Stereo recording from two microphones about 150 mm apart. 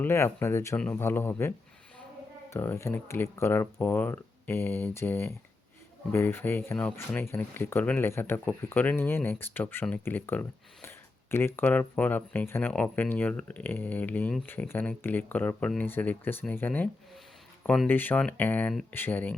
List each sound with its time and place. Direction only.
0.0 s speech: 15° left (ahead or behind)
18.7 s speech: centre (ahead or behind)
18.9 s speech: 15° left (ahead or behind)